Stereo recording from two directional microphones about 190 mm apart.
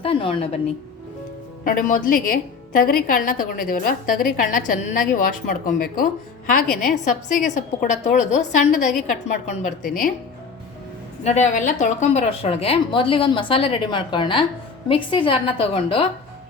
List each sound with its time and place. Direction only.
0.0 s a woman's voice: 30° left (ahead or behind)
1.6 s a woman's voice: 45° left (ahead or behind)
11.2 s a woman's voice: 35° left (ahead or behind)